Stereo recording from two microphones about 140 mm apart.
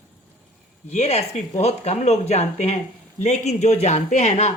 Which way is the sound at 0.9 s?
50° left (ahead or behind).